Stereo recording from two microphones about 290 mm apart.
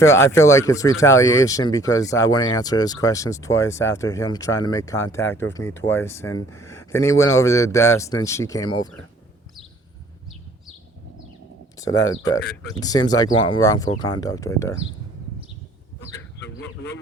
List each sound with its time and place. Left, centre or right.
0.0 s speech: centre
12.8 s speech: centre
16.4 s a sound: left